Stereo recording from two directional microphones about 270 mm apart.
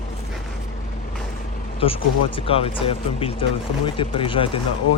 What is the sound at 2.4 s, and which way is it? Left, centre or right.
Speech, left.